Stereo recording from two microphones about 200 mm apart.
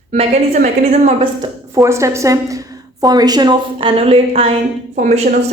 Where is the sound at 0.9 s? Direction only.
35° right (ahead or behind).